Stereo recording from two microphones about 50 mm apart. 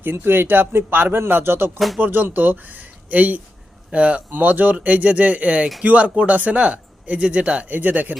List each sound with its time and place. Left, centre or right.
0.0 s speech: right
4.3 s speech: right